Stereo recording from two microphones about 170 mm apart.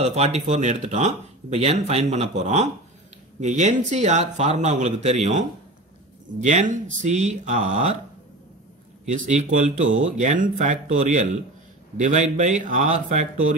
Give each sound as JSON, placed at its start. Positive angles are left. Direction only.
{"t": 0.0, "sound": "speech", "side_deg": -40}
{"t": 6.4, "sound": "speech", "side_deg": -45}
{"t": 9.1, "sound": "speech", "side_deg": -45}